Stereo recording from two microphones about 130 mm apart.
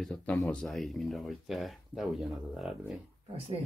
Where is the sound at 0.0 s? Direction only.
5° left (ahead or behind).